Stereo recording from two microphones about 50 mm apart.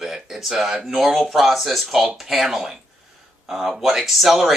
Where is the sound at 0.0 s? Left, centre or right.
Centre.